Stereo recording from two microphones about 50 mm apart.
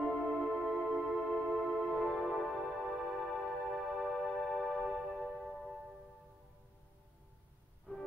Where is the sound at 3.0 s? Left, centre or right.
Centre.